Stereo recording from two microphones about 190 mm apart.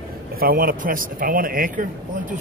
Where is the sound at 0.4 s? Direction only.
50° right (ahead or behind).